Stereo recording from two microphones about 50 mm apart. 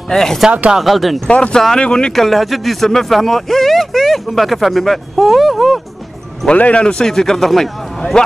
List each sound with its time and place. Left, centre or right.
0.1 s a man's voice: centre
0.7 s speech: centre
1.3 s a man's voice: left
2.1 s speech: centre
6.5 s a man's voice: left; by 8.2 s centre